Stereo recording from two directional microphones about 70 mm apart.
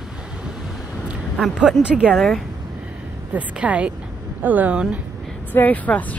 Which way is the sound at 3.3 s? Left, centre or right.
Centre.